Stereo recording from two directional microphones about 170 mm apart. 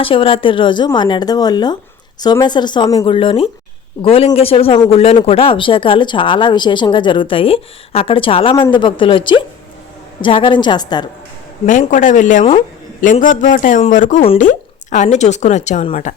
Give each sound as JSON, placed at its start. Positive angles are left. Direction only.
{"t": 0.0, "sound": "a man's voice", "side_deg": 30}
{"t": 11.6, "sound": "a woman's voice", "side_deg": 50}